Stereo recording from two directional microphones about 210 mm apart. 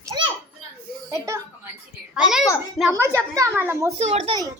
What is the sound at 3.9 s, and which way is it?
Speech, 30° right (ahead or behind).